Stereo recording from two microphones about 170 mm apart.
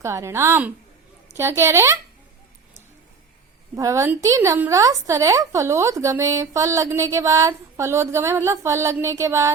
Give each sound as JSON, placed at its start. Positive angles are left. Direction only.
{"t": 0.0, "sound": "a woman's voice", "side_deg": -15}
{"t": 3.8, "sound": "a woman's voice", "side_deg": -20}